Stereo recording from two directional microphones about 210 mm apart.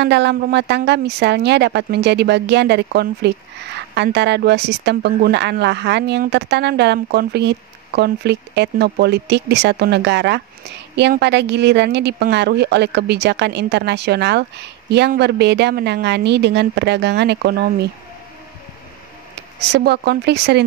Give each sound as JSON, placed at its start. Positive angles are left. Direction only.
{"t": 0.0, "sound": "speech", "side_deg": -55}
{"t": 19.7, "sound": "speech", "side_deg": -50}